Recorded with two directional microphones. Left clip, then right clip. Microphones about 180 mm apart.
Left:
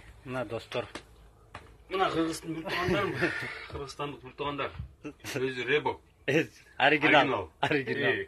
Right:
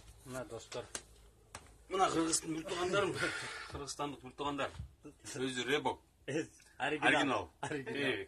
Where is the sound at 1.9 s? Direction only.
55° right (ahead or behind).